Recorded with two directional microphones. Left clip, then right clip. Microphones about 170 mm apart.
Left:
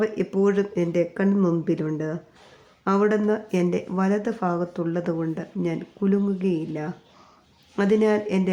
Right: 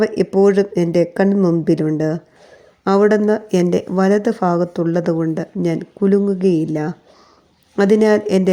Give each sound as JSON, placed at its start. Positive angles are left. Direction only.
{"t": 0.0, "sound": "speech", "side_deg": -25}